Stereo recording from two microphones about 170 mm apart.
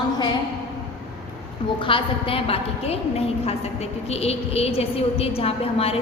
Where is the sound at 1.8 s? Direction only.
30° left (ahead or behind).